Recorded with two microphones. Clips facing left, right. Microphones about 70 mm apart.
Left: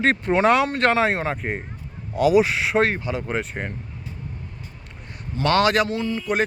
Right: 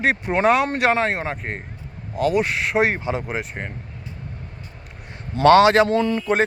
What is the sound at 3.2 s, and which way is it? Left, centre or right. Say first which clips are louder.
Speech: left 1 dB; centre.